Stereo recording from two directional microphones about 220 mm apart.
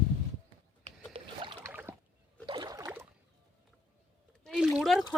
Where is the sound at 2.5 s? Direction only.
15° right (ahead or behind).